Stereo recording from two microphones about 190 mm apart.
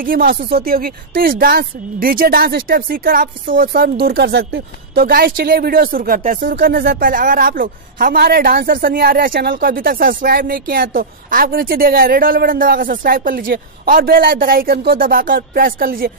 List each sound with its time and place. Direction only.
0.0 s speech: 50° right (ahead or behind)